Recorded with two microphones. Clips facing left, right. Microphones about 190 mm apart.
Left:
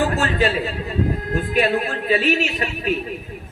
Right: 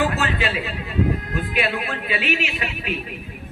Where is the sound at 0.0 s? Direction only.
45° left (ahead or behind).